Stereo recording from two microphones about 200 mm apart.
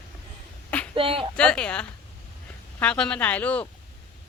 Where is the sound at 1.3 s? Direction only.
5° left (ahead or behind).